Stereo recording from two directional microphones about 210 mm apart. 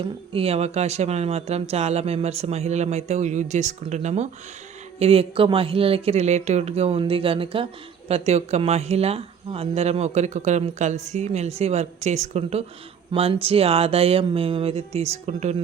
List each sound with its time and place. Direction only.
0.0 s speech: 25° right (ahead or behind)